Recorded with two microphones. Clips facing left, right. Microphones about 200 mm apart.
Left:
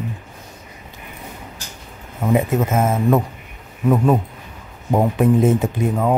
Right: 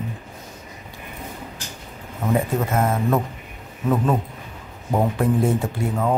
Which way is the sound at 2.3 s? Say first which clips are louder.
Left 4 dB; 20° left (ahead or behind).